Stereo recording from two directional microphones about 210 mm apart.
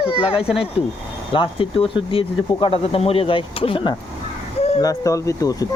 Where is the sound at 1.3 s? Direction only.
25° left (ahead or behind).